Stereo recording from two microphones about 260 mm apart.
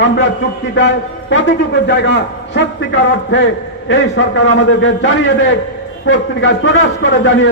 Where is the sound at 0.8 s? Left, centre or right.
Left.